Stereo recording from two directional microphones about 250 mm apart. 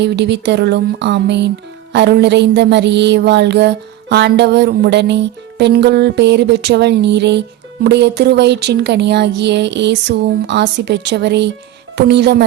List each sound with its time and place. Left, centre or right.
0.0 s mantra: right